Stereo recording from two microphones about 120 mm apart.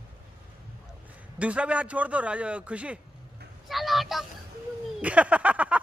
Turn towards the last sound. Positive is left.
turn(degrees=-10)  # may be behind; listen again after turning